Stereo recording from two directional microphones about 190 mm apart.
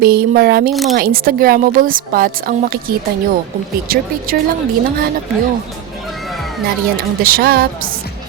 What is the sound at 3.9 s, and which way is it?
Speech, 50° right (ahead or behind).